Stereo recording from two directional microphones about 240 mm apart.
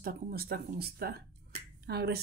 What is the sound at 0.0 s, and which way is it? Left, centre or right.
Speech, right.